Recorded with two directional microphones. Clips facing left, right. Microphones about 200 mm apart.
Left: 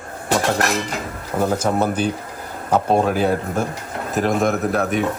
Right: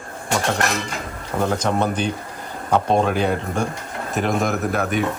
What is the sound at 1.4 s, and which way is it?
A man's voice, 5° left (ahead or behind).